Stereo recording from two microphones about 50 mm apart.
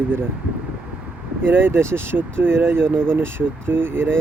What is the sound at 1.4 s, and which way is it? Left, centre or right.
Speech, right.